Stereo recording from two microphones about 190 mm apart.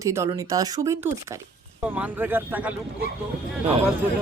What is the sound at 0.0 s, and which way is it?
Speech, 15° right (ahead or behind).